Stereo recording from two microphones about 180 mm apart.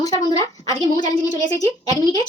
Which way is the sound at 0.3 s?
20° left (ahead or behind).